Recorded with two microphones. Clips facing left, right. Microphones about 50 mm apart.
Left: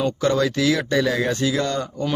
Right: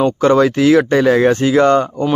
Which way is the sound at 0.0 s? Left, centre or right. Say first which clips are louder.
Right 8 dB; right.